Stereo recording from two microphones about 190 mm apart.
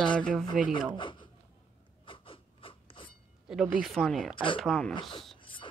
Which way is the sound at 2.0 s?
25° left (ahead or behind).